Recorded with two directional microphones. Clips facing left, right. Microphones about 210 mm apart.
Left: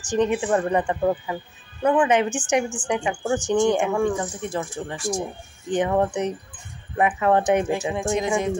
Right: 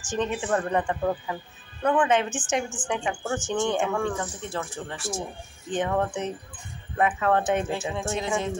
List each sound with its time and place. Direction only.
0.2 s speech: 15° left (ahead or behind)
2.2 s a woman's voice: centre (ahead or behind)
2.9 s speech: 15° left (ahead or behind)